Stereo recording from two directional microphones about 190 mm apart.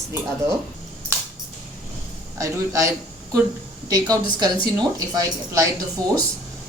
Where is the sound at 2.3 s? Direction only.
15° right (ahead or behind).